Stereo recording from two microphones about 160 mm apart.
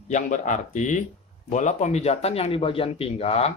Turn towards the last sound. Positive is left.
turn(degrees=40)  # may be behind; listen again after turning